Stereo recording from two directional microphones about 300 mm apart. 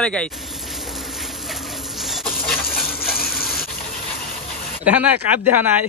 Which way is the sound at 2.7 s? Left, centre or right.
Left.